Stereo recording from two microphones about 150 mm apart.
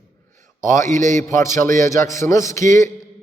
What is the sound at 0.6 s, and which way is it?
Speech, 60° right (ahead or behind).